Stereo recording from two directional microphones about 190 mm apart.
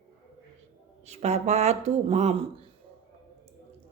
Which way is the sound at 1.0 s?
35° right (ahead or behind).